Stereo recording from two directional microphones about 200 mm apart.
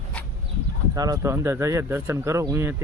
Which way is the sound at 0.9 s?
20° right (ahead or behind).